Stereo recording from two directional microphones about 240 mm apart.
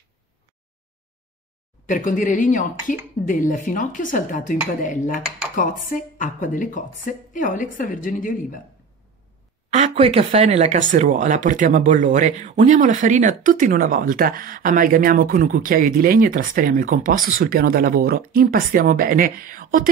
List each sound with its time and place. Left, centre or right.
1.9 s a woman's voice: left
9.7 s speech: right